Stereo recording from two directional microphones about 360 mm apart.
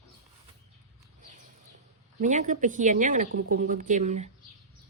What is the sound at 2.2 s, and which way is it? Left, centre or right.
Speech, centre.